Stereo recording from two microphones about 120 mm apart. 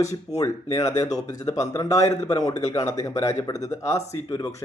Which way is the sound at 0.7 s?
25° left (ahead or behind).